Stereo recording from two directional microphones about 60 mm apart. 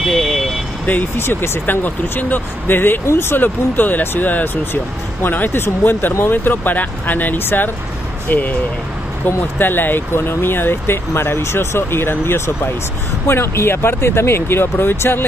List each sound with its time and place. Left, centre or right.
0.1 s vehicle: centre
0.8 s speech: left